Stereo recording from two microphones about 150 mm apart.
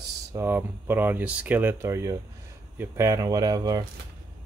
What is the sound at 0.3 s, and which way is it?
Speech, 15° right (ahead or behind).